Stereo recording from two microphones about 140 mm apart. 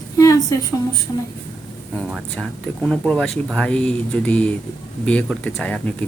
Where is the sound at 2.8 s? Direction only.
Centre (ahead or behind).